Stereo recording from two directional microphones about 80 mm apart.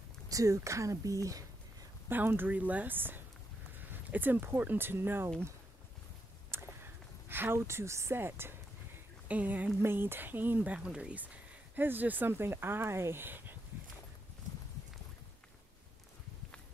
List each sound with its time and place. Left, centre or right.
0.3 s speech: right
2.0 s speech: right
6.8 s speech: right
11.7 s speech: right